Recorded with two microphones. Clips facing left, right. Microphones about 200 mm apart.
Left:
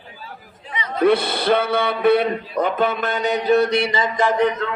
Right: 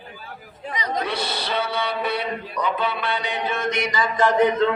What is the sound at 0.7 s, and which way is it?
Chatter, 40° right (ahead or behind).